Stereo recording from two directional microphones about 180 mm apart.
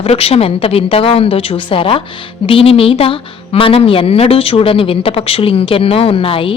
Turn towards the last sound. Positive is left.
turn(degrees=30)  # may be behind; listen again after turning